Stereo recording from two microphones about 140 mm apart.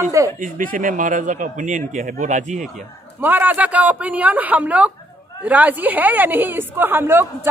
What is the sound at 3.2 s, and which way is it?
A woman's voice, 15° right (ahead or behind).